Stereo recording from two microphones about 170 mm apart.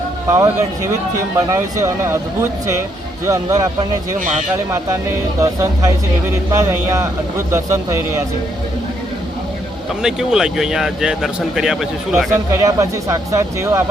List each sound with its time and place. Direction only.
0.3 s speech: 15° right (ahead or behind)
10.0 s speech: 5° right (ahead or behind)
12.5 s speech: 20° right (ahead or behind)